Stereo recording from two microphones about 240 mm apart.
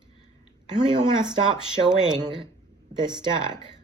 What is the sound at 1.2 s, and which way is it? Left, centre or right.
Speech, centre.